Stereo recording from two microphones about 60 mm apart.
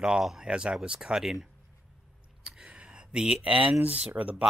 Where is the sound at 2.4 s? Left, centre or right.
Centre.